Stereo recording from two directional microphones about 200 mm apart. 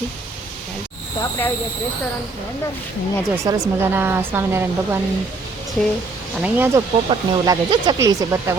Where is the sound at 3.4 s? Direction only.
15° right (ahead or behind).